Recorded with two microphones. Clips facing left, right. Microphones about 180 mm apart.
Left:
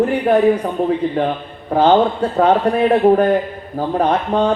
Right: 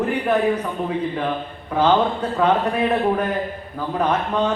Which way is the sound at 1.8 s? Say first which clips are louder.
Left 5 dB; 45° left (ahead or behind).